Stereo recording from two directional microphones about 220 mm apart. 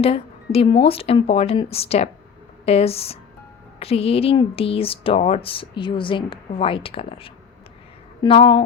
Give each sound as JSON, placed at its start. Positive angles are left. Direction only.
{"t": 0.0, "sound": "speech", "side_deg": 25}